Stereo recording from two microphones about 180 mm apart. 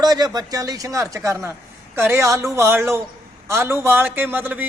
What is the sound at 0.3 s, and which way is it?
A man's voice, 20° right (ahead or behind).